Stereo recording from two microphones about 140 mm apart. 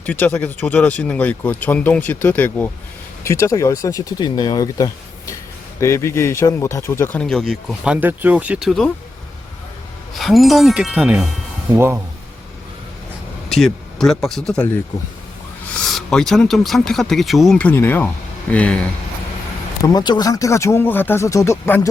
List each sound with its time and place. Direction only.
0.0 s speech: 10° left (ahead or behind)
7.2 s speech: 5° left (ahead or behind)
8.0 s speech: 10° right (ahead or behind)
10.2 s speech: centre (ahead or behind); by 11.9 s 15° right (ahead or behind)
13.5 s speech: centre (ahead or behind)
15.9 s speech: 5° left (ahead or behind)
19.8 s speech: 30° left (ahead or behind)